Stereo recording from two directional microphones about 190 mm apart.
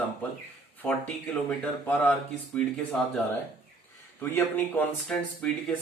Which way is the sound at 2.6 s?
5° left (ahead or behind).